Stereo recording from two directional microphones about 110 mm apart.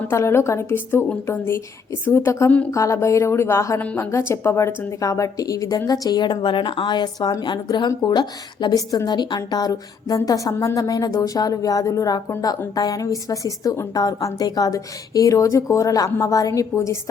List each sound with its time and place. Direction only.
0.1 s a woman's voice: 25° left (ahead or behind)